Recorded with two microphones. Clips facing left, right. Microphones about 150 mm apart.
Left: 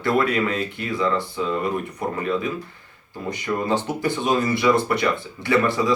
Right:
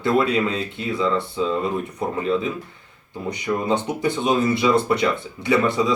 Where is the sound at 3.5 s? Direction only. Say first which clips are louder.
Even; 20° right (ahead or behind).